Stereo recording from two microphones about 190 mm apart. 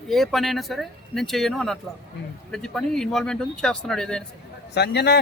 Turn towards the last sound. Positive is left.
turn(degrees=60)  # may be behind; listen again after turning